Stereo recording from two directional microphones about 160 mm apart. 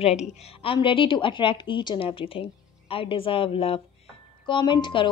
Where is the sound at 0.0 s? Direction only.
45° left (ahead or behind).